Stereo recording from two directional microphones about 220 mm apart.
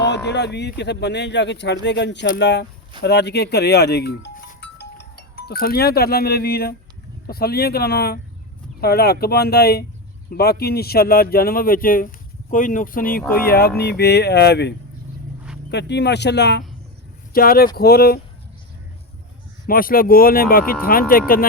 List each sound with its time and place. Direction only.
0.0 s speech: 50° left (ahead or behind)
19.6 s speech: 40° left (ahead or behind)